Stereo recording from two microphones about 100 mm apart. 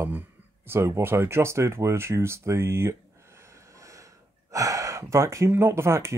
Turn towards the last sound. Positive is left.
turn(degrees=-25)  # may be behind; listen again after turning